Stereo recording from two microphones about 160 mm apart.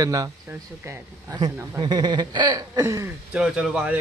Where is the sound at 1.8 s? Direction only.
25° right (ahead or behind).